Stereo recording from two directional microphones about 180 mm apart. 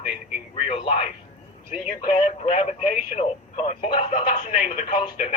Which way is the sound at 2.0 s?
35° left (ahead or behind).